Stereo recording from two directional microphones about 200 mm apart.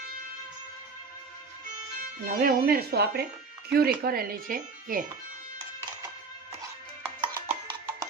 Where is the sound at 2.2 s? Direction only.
45° right (ahead or behind).